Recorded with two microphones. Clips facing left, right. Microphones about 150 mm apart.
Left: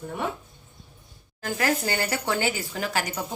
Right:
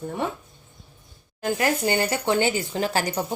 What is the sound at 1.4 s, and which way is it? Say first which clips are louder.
Speech: right 3 dB; 20° right (ahead or behind).